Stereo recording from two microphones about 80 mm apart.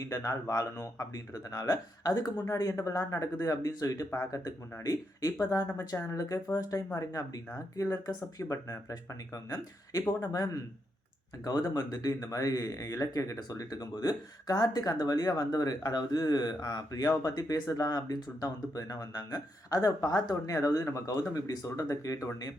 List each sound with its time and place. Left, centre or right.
0.0 s speech: left